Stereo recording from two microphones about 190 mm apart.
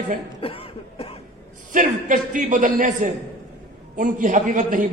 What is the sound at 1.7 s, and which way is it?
A man's voice, 45° right (ahead or behind).